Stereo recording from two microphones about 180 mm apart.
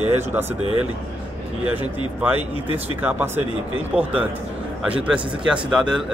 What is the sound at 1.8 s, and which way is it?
Speech, 10° right (ahead or behind).